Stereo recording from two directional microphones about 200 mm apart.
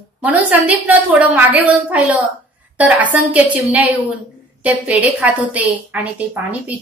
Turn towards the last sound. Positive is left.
turn(degrees=-5)  # may be behind; listen again after turning